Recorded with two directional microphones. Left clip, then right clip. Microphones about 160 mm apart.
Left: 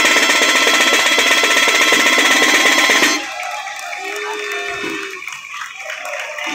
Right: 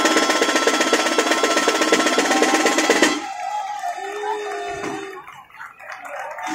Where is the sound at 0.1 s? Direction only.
40° right (ahead or behind).